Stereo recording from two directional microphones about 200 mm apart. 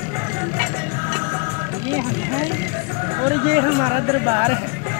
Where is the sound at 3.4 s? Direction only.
30° right (ahead or behind).